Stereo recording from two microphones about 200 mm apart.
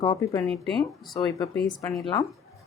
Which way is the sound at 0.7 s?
Centre (ahead or behind).